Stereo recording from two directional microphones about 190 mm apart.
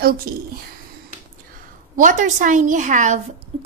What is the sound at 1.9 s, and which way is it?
A woman's voice, 45° right (ahead or behind).